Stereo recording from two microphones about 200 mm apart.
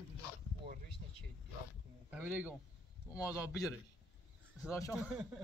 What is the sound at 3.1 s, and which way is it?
Speech, 15° left (ahead or behind).